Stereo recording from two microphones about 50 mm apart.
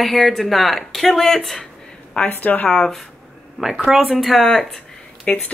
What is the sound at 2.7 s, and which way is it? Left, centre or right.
Speech, centre.